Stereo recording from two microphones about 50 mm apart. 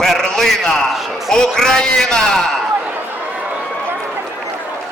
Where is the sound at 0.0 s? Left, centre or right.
Centre.